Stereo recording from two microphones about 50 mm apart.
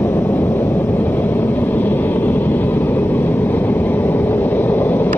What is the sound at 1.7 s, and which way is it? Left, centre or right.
Vehicle, left.